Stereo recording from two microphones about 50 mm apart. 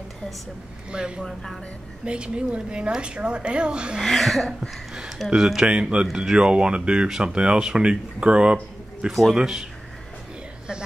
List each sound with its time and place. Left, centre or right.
0.9 s speech: centre
1.2 s speech: centre
2.0 s speech: centre
4.0 s speech: centre
4.6 s a sound: centre
5.3 s speech: centre
6.0 s speech: centre
6.3 s speech: centre
9.1 s speech: centre
9.4 s speech: centre